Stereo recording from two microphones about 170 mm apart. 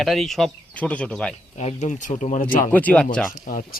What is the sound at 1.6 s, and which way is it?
A man's voice, 40° left (ahead or behind).